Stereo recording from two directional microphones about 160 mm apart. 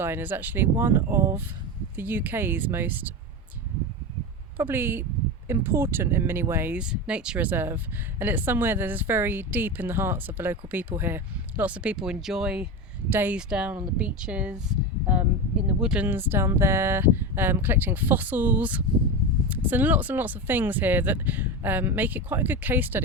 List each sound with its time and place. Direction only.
0.0 s speech: 10° right (ahead or behind)
4.5 s speech: 15° right (ahead or behind)